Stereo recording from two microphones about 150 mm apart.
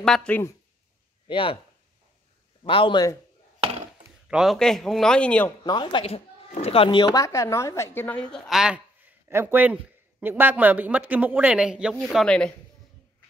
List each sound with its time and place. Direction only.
0.0 s a man's voice: 5° left (ahead or behind)
1.2 s speech: 35° left (ahead or behind)
2.6 s a man's voice: 35° left (ahead or behind)
4.3 s a man's voice: centre (ahead or behind)
5.6 s a woman's voice: 30° left (ahead or behind); by 12.5 s 5° left (ahead or behind)